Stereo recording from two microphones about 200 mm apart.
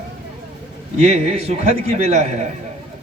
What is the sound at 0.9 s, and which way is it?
Speech, 35° right (ahead or behind).